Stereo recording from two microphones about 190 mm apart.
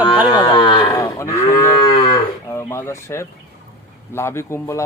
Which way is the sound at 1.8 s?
30° left (ahead or behind).